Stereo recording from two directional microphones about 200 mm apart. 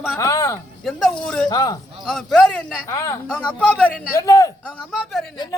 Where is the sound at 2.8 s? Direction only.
15° left (ahead or behind).